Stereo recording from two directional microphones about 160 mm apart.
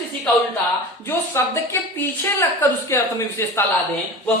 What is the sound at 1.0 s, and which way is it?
A woman's voice, 15° left (ahead or behind).